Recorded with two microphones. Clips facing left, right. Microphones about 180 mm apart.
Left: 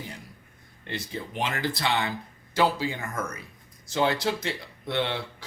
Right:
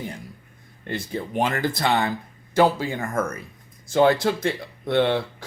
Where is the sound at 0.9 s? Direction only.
50° right (ahead or behind).